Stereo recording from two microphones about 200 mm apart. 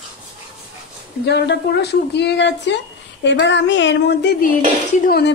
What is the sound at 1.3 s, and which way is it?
A woman's voice, 55° left (ahead or behind).